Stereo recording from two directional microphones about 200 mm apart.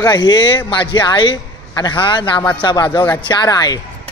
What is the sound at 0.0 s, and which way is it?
A man's voice, 20° left (ahead or behind).